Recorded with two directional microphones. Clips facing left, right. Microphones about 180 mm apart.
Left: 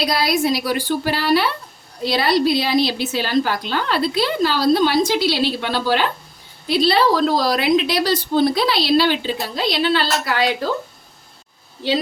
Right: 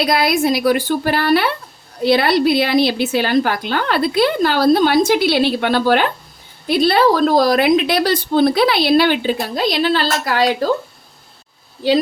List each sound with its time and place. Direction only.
0.0 s a woman's voice: 55° right (ahead or behind)